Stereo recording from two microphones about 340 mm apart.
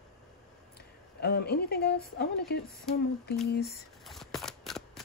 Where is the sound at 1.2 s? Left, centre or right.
Left.